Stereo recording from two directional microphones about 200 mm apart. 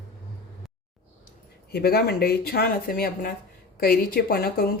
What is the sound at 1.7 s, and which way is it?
A woman's voice, 50° left (ahead or behind).